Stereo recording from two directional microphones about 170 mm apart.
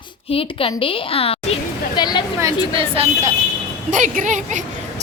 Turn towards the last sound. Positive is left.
turn(degrees=-45)  # may be behind; listen again after turning